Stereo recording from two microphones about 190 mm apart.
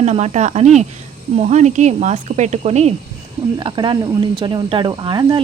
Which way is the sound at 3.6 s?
25° right (ahead or behind).